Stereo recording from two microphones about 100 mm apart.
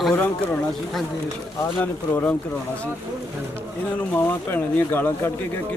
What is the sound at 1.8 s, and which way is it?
Speech, 20° left (ahead or behind).